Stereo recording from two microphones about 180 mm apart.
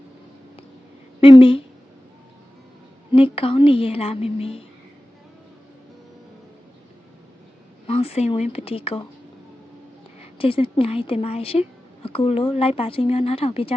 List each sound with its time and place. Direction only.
1.2 s a woman's voice: 30° left (ahead or behind)
3.1 s speech: 30° left (ahead or behind)
7.9 s speech: 35° left (ahead or behind)
10.2 s speech: 30° left (ahead or behind)